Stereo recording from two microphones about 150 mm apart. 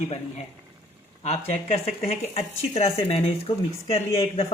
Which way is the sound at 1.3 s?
45° left (ahead or behind).